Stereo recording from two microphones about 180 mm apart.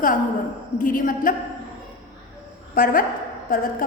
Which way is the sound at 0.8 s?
50° left (ahead or behind).